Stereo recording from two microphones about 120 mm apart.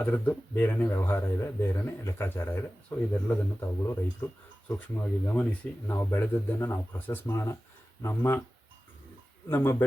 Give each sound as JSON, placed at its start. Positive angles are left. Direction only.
{"t": 0.0, "sound": "a man's voice", "side_deg": 15}
{"t": 9.5, "sound": "speech", "side_deg": 15}